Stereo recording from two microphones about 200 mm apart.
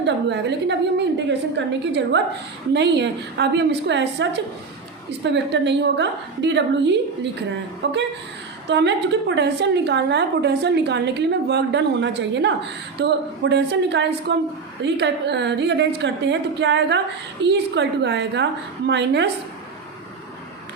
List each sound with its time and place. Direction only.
0.0 s a woman's voice: 60° right (ahead or behind)